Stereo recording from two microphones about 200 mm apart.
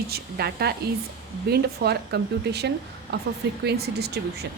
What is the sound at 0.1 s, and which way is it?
Speech, 50° right (ahead or behind).